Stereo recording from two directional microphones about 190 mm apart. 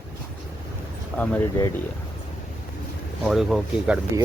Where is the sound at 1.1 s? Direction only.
10° left (ahead or behind).